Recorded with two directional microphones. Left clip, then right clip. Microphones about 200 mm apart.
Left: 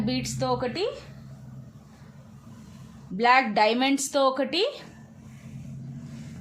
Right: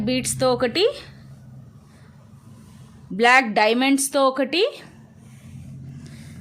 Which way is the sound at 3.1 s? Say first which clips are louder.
Right 4 dB; 35° right (ahead or behind).